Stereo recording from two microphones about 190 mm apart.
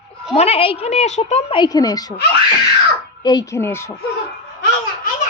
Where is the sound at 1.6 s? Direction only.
20° left (ahead or behind).